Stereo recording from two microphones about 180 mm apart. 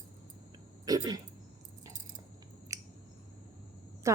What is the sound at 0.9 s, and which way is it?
Speech, 20° right (ahead or behind).